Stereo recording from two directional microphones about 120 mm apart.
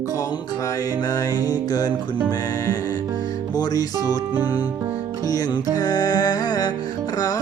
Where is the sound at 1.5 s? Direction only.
30° left (ahead or behind).